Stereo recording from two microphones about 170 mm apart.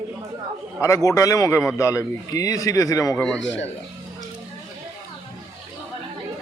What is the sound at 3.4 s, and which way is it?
Speech, 90° left.